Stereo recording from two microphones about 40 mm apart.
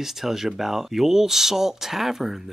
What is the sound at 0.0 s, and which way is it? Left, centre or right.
Speech, centre.